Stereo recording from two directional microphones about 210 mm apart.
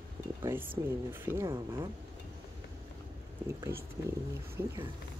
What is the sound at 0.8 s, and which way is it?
Speech, 10° right (ahead or behind).